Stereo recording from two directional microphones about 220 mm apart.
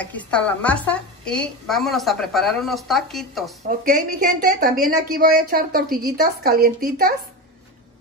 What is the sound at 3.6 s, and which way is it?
A woman's voice, 40° right (ahead or behind).